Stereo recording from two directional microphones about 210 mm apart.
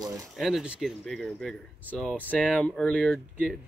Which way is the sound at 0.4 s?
Centre (ahead or behind).